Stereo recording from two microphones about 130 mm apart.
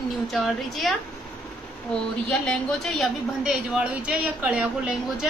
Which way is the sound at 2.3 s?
5° left (ahead or behind).